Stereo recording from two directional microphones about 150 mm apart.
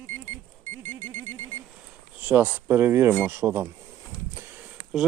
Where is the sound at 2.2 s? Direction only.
10° right (ahead or behind).